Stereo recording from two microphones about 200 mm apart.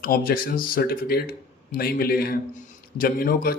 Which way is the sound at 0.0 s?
45° left (ahead or behind).